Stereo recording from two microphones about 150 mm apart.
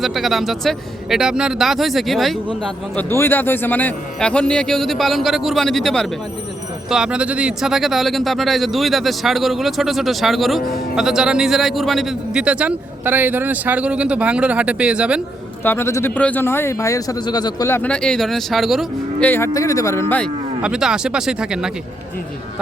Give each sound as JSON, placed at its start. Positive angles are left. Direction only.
{"t": 0.0, "sound": "speech", "side_deg": 0}
{"t": 15.6, "sound": "speech", "side_deg": 15}
{"t": 17.7, "sound": "speech", "side_deg": 10}
{"t": 19.2, "sound": "speech", "side_deg": 15}
{"t": 20.6, "sound": "speech", "side_deg": -5}